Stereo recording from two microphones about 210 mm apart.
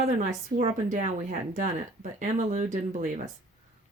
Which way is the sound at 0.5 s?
35° right (ahead or behind).